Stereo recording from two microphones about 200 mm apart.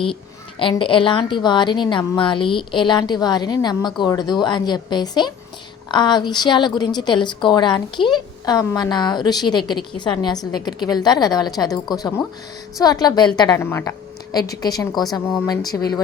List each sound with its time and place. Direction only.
0.6 s a woman's voice: 25° left (ahead or behind)